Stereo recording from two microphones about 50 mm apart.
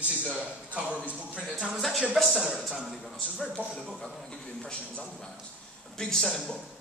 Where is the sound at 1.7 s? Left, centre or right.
Centre.